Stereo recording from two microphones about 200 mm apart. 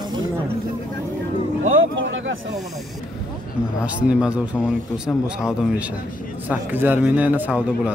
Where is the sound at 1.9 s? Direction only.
75° right (ahead or behind).